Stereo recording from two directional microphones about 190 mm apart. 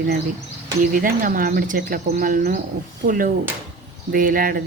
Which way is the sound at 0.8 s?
45° right (ahead or behind).